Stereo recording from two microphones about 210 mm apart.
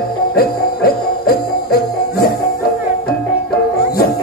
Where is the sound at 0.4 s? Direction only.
45° left (ahead or behind).